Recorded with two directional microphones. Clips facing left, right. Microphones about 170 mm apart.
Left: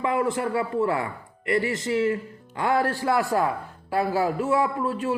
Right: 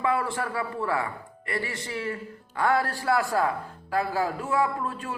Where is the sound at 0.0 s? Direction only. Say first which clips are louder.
Left 3 dB; 20° left (ahead or behind).